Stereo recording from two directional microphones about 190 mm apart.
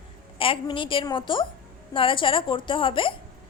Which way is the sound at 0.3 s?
30° left (ahead or behind).